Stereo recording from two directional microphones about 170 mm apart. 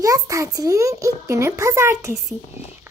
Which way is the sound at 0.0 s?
20° right (ahead or behind).